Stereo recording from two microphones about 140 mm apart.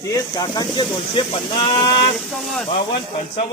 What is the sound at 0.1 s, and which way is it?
Speech, 30° left (ahead or behind).